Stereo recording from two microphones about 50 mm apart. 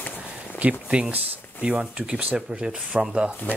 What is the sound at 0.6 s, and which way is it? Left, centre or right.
Speech, right.